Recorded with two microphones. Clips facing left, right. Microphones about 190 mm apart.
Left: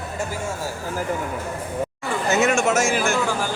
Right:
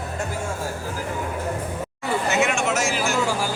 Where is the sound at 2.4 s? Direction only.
40° left (ahead or behind).